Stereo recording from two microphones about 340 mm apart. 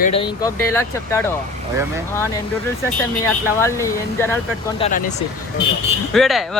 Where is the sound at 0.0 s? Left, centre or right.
Centre.